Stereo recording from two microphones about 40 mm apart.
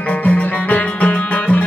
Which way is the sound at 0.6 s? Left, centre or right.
Left.